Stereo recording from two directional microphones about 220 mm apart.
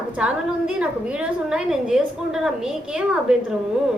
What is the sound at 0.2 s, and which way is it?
A woman's voice, 5° right (ahead or behind).